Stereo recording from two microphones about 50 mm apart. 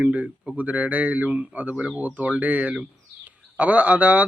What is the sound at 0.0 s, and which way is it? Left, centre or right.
A man's voice, right.